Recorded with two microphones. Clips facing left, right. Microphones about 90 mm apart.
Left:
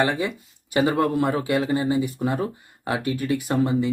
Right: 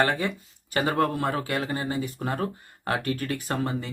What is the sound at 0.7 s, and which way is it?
Speech, 15° left (ahead or behind).